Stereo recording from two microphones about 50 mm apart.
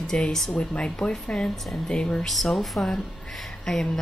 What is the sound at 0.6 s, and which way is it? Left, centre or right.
Speech, left.